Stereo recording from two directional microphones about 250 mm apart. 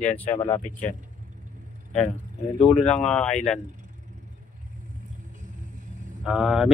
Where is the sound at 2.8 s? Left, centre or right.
Centre.